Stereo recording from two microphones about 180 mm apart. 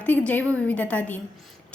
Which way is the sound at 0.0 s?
10° left (ahead or behind).